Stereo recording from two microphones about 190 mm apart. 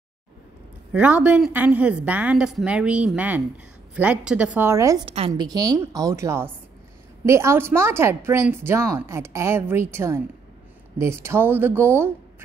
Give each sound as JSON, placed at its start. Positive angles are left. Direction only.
{"t": 0.9, "sound": "a woman's voice", "side_deg": -5}
{"t": 5.0, "sound": "a woman's voice", "side_deg": -30}
{"t": 5.5, "sound": "a woman's voice", "side_deg": -20}